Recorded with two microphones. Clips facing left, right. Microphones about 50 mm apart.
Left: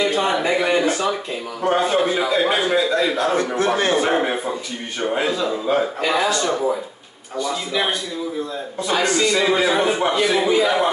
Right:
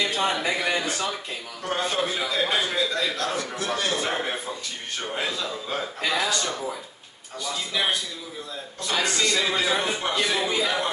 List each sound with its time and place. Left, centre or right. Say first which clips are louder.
0.0 s a man's voice: left 6 dB; left
3.3 s a man's voice: left 9 dB; left
9.0 s a man's voice: left 6 dB; left